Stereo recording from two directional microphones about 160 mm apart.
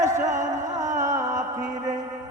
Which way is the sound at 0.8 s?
50° right (ahead or behind).